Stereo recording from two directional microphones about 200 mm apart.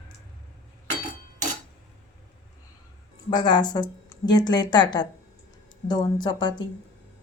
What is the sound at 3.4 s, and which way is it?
Speech, 20° left (ahead or behind).